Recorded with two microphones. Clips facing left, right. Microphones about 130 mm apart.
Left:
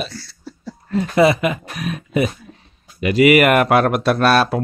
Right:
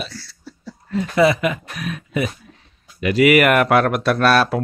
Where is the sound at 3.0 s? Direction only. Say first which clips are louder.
Left 1 dB; 5° left (ahead or behind).